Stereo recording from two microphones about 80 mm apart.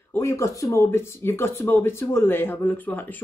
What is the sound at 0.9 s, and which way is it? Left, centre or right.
Speech, left.